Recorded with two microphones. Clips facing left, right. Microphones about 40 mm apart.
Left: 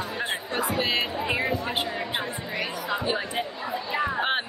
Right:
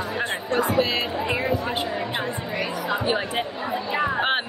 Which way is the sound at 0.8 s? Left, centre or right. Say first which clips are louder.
Right 1 dB; centre.